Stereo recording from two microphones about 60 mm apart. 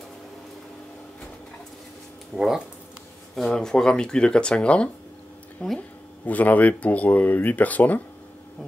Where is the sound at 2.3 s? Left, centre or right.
Centre.